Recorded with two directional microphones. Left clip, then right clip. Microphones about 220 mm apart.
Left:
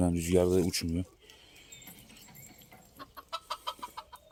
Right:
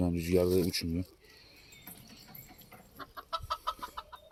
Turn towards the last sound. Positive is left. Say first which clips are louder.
# right 2 dB
turn(degrees=45)  # may be behind; listen again after turning